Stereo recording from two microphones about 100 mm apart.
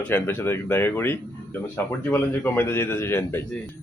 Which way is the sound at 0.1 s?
25° left (ahead or behind).